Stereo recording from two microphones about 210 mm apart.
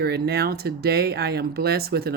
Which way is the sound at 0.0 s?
50° right (ahead or behind).